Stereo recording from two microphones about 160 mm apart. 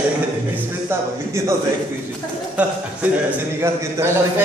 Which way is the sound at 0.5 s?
15° right (ahead or behind).